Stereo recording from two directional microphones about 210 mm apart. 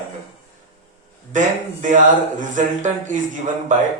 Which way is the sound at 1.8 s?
35° right (ahead or behind).